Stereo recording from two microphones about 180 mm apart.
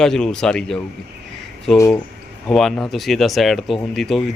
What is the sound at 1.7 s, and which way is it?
Speech, 15° left (ahead or behind).